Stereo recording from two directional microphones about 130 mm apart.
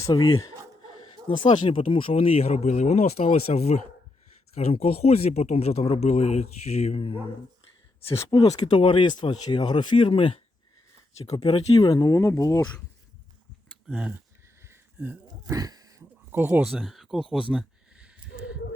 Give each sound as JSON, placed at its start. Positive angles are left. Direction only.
{"t": 0.0, "sound": "speech", "side_deg": 25}
{"t": 1.5, "sound": "speech", "side_deg": 45}
{"t": 8.2, "sound": "speech", "side_deg": 30}
{"t": 11.3, "sound": "speech", "side_deg": 30}
{"t": 13.8, "sound": "speech", "side_deg": -10}
{"t": 14.6, "sound": "a sound", "side_deg": -15}
{"t": 15.3, "sound": "a sound", "side_deg": -30}
{"t": 16.6, "sound": "speech", "side_deg": 0}
{"t": 17.5, "sound": "a sound", "side_deg": -10}